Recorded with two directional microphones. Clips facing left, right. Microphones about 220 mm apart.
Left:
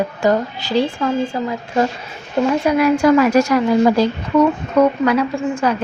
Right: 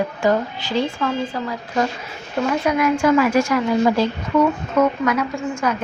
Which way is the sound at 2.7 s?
30° left (ahead or behind).